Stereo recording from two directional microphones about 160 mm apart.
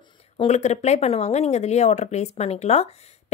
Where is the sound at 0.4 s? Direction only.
45° left (ahead or behind).